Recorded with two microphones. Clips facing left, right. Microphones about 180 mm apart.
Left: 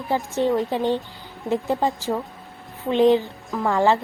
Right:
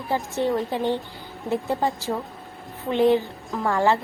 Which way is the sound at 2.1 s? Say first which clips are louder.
Left 2 dB; 5° left (ahead or behind).